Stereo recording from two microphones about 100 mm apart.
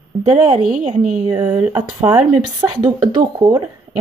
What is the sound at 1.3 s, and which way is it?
Speech, 40° right (ahead or behind).